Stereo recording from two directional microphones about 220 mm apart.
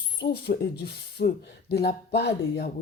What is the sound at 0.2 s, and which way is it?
Speech, 45° left (ahead or behind).